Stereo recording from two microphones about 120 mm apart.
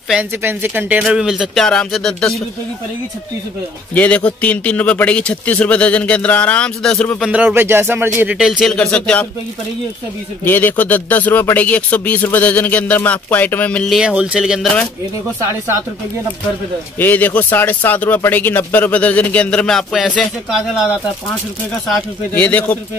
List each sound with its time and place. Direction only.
0.4 s speech: 20° right (ahead or behind)
1.0 s speech: 5° right (ahead or behind)
3.9 s a man's voice: 10° left (ahead or behind)
7.2 s speech: 10° right (ahead or behind)
8.4 s speech: centre (ahead or behind)
8.7 s a man's voice: 10° left (ahead or behind)
10.4 s a man's voice: 15° left (ahead or behind)
13.8 s speech: 5° right (ahead or behind)
17.0 s a man's voice: 15° left (ahead or behind); by 20.9 s 5° right (ahead or behind)
22.3 s a man's voice: 15° left (ahead or behind)